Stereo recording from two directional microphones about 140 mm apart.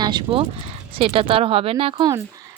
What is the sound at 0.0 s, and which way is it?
Speech, 35° right (ahead or behind).